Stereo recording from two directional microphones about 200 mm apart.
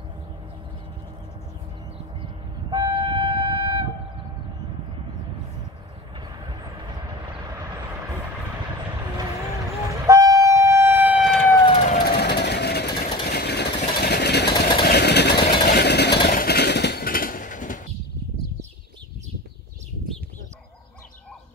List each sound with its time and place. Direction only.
2.7 s train: 20° right (ahead or behind)
10.0 s train: 15° right (ahead or behind)
11.8 s train: 40° left (ahead or behind)
12.1 s vehicle: 55° left (ahead or behind)